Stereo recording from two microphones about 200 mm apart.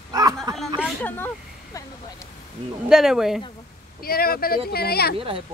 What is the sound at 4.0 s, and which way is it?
Speech, 50° left (ahead or behind).